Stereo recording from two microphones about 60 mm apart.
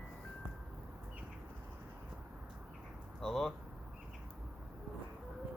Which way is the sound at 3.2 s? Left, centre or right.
Centre.